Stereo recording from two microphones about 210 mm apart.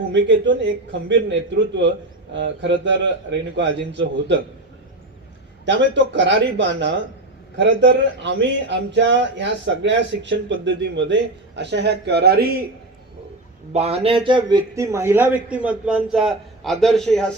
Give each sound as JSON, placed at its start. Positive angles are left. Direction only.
{"t": 0.1, "sound": "speech", "side_deg": -60}
{"t": 5.6, "sound": "speech", "side_deg": -55}
{"t": 13.7, "sound": "a man's voice", "side_deg": -30}